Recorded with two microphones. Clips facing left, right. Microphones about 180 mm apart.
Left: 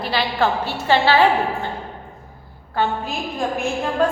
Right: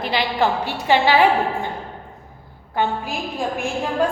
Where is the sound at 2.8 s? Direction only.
15° right (ahead or behind).